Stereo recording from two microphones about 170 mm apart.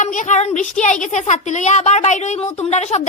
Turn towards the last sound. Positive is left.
turn(degrees=40)  # may be behind; listen again after turning